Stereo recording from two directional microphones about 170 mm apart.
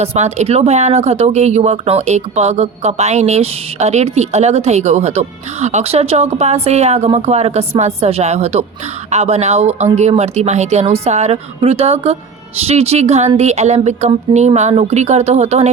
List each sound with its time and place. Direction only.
0.0 s speech: 40° right (ahead or behind)